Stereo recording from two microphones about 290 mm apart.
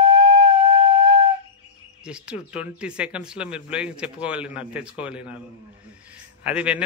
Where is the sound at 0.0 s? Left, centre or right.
Centre.